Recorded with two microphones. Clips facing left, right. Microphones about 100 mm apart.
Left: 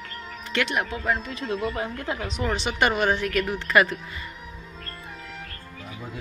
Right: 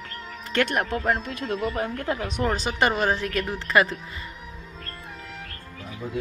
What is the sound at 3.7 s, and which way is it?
Speech, 25° right (ahead or behind).